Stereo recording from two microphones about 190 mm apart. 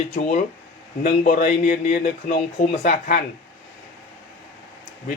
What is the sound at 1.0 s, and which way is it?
Speech, 50° left (ahead or behind).